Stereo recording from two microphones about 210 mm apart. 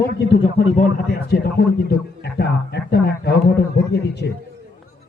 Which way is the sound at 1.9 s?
50° left (ahead or behind).